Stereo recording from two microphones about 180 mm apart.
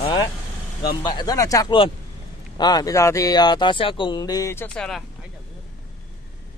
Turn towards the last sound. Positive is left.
turn(degrees=5)  # may be behind; listen again after turning